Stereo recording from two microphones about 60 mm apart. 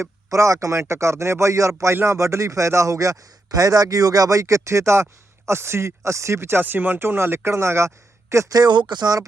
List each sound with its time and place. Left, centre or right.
0.3 s a man's voice: right